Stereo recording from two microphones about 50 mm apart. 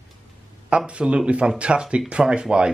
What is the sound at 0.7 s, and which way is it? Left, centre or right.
Speech, right.